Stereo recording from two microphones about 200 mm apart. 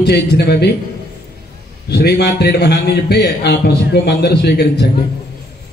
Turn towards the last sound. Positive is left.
turn(degrees=55)  # may be behind; listen again after turning